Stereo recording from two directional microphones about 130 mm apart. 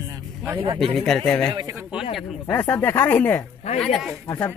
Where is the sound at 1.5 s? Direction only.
30° right (ahead or behind).